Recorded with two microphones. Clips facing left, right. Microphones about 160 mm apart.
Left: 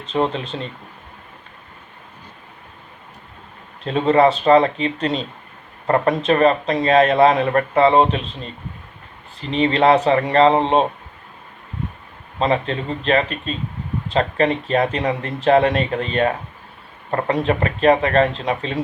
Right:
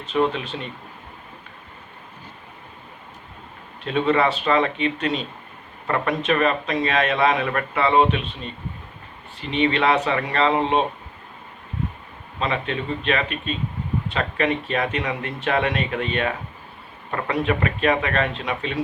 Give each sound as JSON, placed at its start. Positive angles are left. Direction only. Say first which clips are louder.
{"t": 0.1, "sound": "a man's voice", "louder": "left 1 dB", "side_deg": 30}
{"t": 3.8, "sound": "a man's voice", "louder": "left 5 dB", "side_deg": 35}
{"t": 9.5, "sound": "a man's voice", "louder": "left 5 dB", "side_deg": 35}
{"t": 12.4, "sound": "a man's voice", "louder": "left 5 dB", "side_deg": 35}